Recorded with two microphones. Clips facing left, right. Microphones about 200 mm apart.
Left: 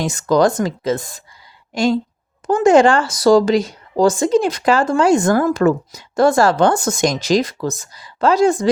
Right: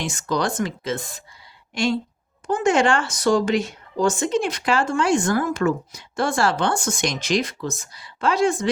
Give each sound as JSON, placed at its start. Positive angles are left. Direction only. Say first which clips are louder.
{"t": 0.0, "sound": "speech", "louder": "left 9 dB", "side_deg": 40}
{"t": 2.5, "sound": "speech", "louder": "left 7 dB", "side_deg": 35}
{"t": 5.6, "sound": "speech", "louder": "left 6 dB", "side_deg": 50}
{"t": 6.1, "sound": "speech", "louder": "left 8 dB", "side_deg": 40}